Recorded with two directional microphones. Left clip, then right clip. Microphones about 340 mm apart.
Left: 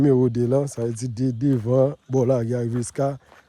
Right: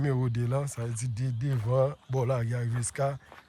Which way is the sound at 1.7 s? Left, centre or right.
Right.